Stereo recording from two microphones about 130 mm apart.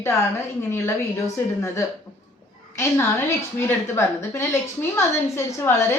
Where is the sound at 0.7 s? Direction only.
20° left (ahead or behind).